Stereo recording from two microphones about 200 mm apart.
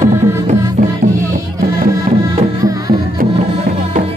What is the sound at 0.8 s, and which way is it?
Music, 40° right (ahead or behind).